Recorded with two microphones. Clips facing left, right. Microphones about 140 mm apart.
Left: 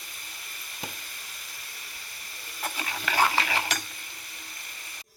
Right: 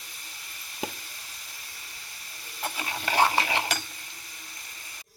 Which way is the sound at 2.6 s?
20° right (ahead or behind).